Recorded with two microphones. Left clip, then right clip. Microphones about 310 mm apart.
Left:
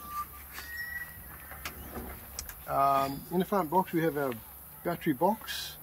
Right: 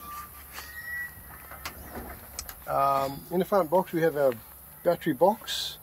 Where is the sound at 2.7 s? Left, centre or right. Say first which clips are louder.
Right 2 dB; right.